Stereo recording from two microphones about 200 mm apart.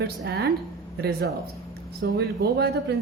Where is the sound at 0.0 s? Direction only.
55° right (ahead or behind).